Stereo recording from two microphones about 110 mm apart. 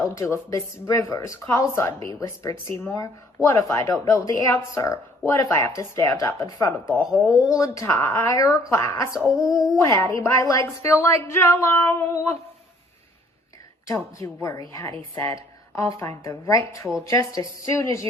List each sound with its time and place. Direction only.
0.0 s speech: 25° left (ahead or behind)
9.5 s a sound: 5° right (ahead or behind)
9.8 s speech: 20° left (ahead or behind)
13.8 s speech: 30° left (ahead or behind)